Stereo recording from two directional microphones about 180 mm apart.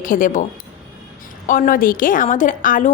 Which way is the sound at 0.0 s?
50° left (ahead or behind).